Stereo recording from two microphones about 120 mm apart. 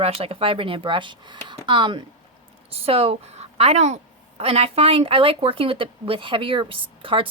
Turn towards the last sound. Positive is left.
turn(degrees=-50)  # may be behind; listen again after turning